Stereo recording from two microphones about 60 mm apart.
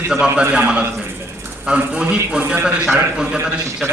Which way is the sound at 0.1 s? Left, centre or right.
Centre.